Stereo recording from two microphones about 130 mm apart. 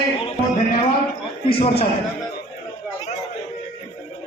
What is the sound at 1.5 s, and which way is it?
Speech, 45° left (ahead or behind).